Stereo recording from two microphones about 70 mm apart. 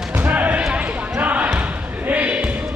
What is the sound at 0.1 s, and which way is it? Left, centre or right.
Basketball bounce, right.